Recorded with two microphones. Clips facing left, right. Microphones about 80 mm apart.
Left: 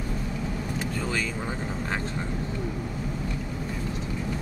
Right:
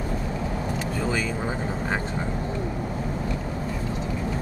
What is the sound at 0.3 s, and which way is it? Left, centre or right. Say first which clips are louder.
Vehicle: right 3 dB; right.